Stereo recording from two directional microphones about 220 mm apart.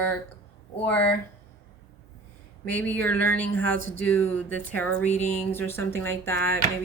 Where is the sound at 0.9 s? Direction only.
5° left (ahead or behind).